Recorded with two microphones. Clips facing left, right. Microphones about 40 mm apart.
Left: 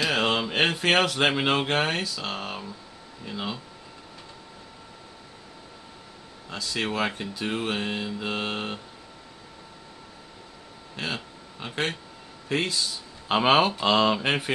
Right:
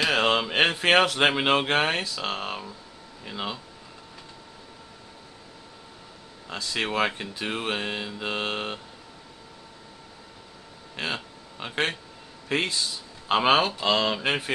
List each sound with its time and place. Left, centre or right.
0.0 s speech: centre
6.6 s speech: right
11.6 s speech: centre
13.3 s speech: centre